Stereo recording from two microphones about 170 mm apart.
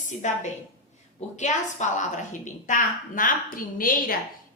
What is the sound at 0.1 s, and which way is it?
A woman's voice, 45° left (ahead or behind).